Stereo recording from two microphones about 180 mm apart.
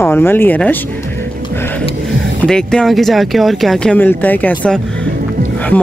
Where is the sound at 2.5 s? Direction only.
5° left (ahead or behind).